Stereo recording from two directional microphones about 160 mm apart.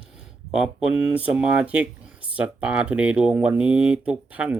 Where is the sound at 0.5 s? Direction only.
5° right (ahead or behind).